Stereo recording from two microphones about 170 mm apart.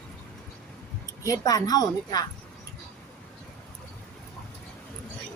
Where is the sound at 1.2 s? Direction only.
20° left (ahead or behind).